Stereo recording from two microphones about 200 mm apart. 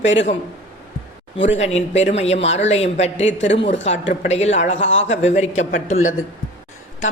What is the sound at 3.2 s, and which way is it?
Speech, 65° left (ahead or behind).